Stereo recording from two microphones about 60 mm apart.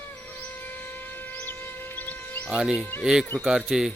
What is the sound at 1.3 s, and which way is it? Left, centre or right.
Music, left.